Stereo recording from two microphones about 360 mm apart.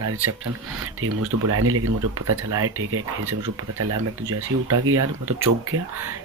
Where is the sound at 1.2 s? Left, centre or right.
Right.